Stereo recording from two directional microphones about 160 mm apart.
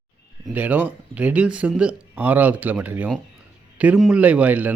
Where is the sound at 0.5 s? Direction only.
10° right (ahead or behind).